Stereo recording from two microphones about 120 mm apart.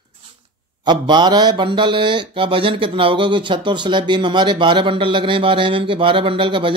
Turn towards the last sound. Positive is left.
turn(degrees=-45)  # may be behind; listen again after turning